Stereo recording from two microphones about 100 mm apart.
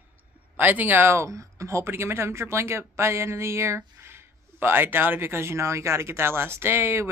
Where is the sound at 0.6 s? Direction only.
20° right (ahead or behind).